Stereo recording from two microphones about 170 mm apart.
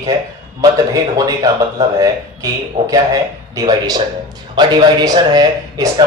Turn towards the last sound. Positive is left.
turn(degrees=-25)  # may be behind; listen again after turning